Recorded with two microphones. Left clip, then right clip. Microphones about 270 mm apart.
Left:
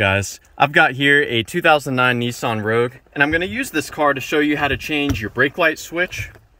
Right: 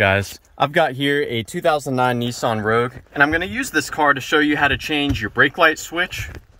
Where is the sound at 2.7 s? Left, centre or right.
Left.